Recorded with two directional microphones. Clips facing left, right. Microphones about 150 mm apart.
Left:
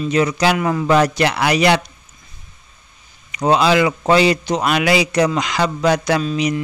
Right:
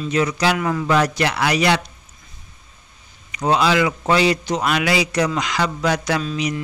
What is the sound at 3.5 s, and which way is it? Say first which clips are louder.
A man's voice: left 3 dB; 20° left (ahead or behind).